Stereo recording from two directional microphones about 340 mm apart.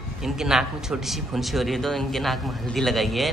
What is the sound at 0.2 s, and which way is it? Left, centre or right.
A man's voice, centre.